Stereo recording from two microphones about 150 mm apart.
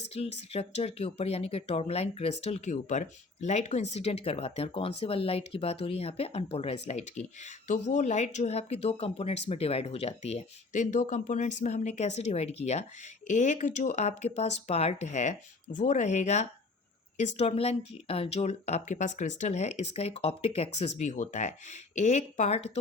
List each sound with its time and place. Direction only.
0.1 s speech: 45° left (ahead or behind)